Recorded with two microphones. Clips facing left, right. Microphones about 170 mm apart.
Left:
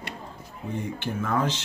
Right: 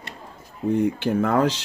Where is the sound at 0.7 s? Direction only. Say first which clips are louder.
Right 10 dB; 60° right (ahead or behind).